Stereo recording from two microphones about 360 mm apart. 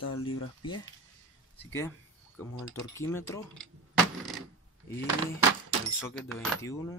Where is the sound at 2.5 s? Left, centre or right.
Left.